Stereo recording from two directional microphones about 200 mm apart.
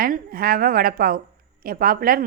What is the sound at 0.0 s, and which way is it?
A woman's voice, 45° right (ahead or behind).